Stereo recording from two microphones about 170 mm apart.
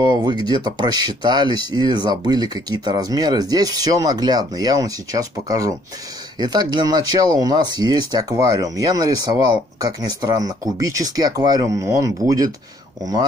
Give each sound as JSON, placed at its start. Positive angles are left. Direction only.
{"t": 0.0, "sound": "speech", "side_deg": -25}